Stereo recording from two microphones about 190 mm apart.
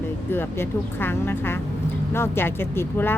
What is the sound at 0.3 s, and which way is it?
Speech, 10° left (ahead or behind).